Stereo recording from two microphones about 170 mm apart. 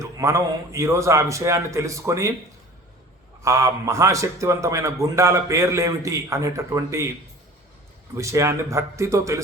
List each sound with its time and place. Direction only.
0.0 s a man's voice: 15° right (ahead or behind)
3.4 s a man's voice: 15° right (ahead or behind)
8.1 s a man's voice: 20° right (ahead or behind)